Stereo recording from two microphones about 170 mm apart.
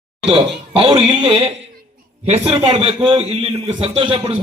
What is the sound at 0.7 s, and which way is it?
A man's voice, 35° right (ahead or behind).